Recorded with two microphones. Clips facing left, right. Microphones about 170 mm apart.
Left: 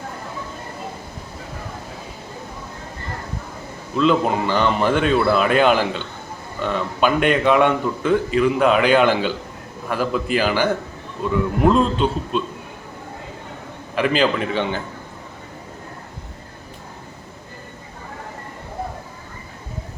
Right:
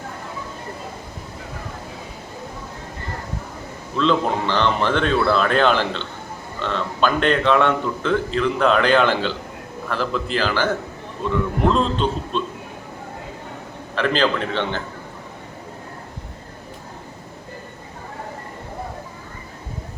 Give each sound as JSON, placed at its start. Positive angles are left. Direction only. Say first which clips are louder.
{"t": 3.9, "sound": "a man's voice", "louder": "left 2 dB", "side_deg": 10}
{"t": 13.9, "sound": "a man's voice", "louder": "left 1 dB", "side_deg": 10}